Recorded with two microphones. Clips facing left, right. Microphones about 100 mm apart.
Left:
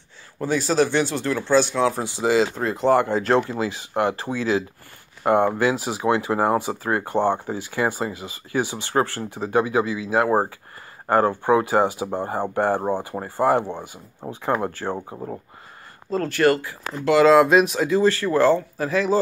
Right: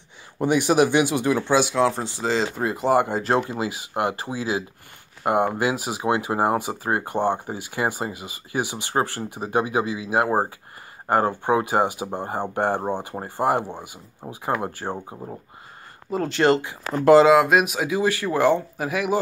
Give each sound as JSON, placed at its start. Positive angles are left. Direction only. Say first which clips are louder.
{"t": 0.4, "sound": "speech", "louder": "right 2 dB", "side_deg": -15}
{"t": 2.0, "sound": "speech", "louder": "left 4 dB", "side_deg": 20}
{"t": 2.5, "sound": "speech", "louder": "left 1 dB", "side_deg": -5}
{"t": 3.4, "sound": "speech", "louder": "left 2 dB", "side_deg": -20}
{"t": 16.1, "sound": "speech", "louder": "even", "side_deg": -15}
{"t": 16.9, "sound": "speech", "louder": "right 6 dB", "side_deg": -35}
{"t": 17.3, "sound": "speech", "louder": "left 2 dB", "side_deg": -5}